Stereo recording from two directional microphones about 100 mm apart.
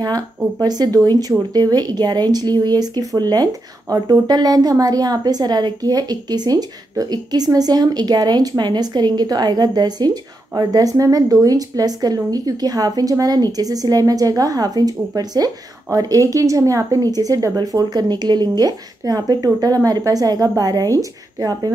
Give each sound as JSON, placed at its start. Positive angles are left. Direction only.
{"t": 0.0, "sound": "a woman's voice", "side_deg": -40}